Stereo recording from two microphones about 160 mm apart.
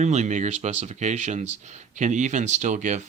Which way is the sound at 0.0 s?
45° right (ahead or behind).